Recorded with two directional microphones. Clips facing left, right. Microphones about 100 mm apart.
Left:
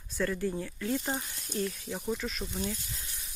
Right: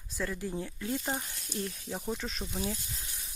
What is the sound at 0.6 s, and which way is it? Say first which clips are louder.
Speech: left 2 dB; 25° right (ahead or behind).